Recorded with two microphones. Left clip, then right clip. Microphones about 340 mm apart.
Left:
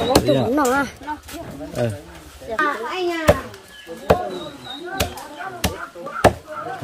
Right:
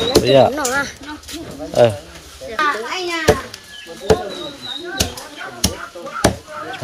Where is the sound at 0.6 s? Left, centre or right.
Left.